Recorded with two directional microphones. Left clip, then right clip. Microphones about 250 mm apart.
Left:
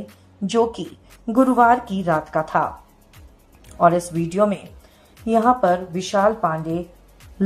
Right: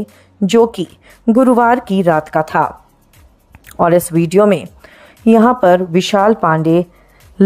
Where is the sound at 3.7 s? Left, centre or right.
Right.